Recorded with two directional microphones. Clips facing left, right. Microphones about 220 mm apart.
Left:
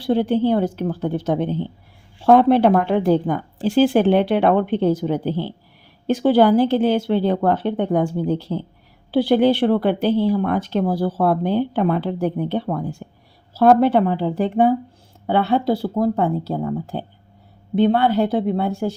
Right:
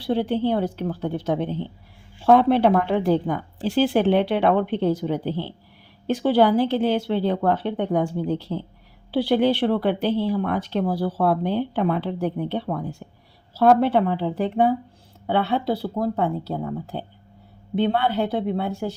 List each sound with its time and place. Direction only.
0.0 s speech: 50° left (ahead or behind)